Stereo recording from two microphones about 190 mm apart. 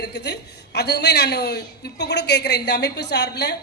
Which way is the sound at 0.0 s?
60° left (ahead or behind).